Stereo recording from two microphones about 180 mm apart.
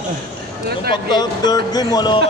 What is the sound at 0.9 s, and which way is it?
Speech, 25° left (ahead or behind).